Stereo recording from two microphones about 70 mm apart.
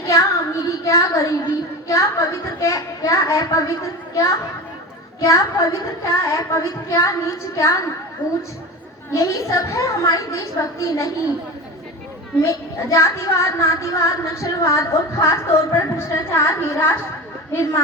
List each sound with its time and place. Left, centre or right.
0.1 s child singing: left
1.9 s speech: left
9.1 s speech: left
12.4 s speech: left